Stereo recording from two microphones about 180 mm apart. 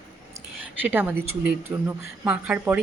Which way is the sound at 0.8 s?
10° right (ahead or behind).